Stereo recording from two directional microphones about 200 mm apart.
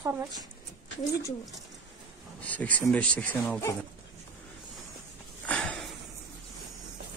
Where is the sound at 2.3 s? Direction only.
5° left (ahead or behind).